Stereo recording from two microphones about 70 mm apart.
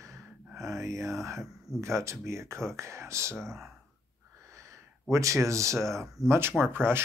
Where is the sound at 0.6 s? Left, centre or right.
Right.